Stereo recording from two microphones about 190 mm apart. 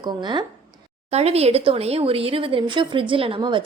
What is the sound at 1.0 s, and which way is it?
A woman's voice, 35° right (ahead or behind).